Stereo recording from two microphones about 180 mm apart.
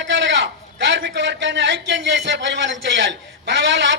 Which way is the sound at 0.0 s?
90° right.